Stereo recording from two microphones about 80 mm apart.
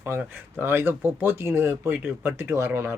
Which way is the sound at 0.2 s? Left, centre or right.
Right.